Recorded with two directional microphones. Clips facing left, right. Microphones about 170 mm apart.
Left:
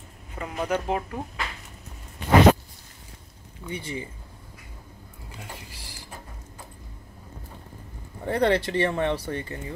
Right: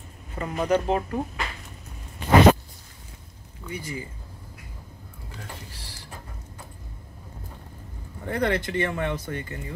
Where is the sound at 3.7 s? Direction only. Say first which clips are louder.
Left 1 dB; 30° left (ahead or behind).